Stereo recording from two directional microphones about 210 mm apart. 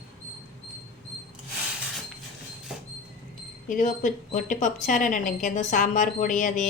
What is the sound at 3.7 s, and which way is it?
A woman's voice, 40° left (ahead or behind).